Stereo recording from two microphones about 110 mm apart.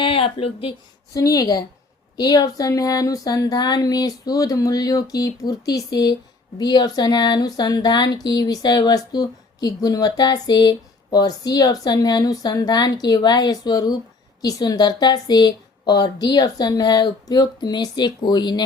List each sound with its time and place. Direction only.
0.0 s speech: 55° left (ahead or behind)
1.1 s speech: 35° left (ahead or behind)